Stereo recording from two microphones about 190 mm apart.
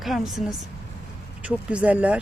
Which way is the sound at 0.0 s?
Centre (ahead or behind).